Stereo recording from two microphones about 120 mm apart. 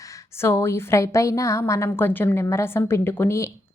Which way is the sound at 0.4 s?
20° left (ahead or behind).